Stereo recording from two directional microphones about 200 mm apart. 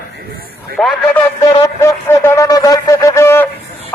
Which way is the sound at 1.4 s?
15° left (ahead or behind).